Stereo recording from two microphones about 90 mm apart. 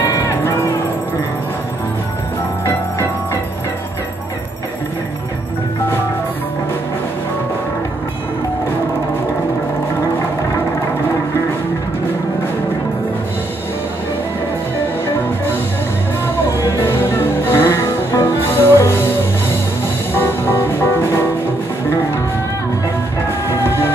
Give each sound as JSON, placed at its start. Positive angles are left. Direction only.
{"t": 0.0, "sound": "a sound", "side_deg": 30}
{"t": 16.4, "sound": "music", "side_deg": 25}
{"t": 20.2, "sound": "music", "side_deg": 25}
{"t": 23.6, "sound": "music", "side_deg": 25}